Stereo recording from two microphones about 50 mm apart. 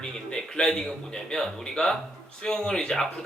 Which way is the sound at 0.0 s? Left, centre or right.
Centre.